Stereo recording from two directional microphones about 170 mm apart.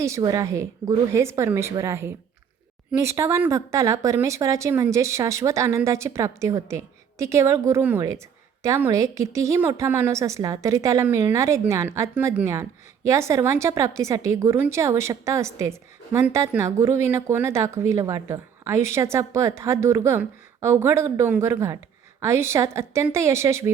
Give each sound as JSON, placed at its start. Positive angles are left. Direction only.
{"t": 0.0, "sound": "a woman's voice", "side_deg": -20}